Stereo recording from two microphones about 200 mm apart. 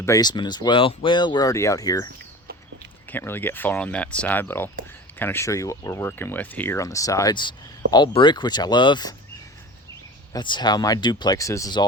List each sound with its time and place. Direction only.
0.0 s speech: 15° left (ahead or behind)
3.1 s speech: 10° left (ahead or behind)
10.3 s speech: 20° left (ahead or behind)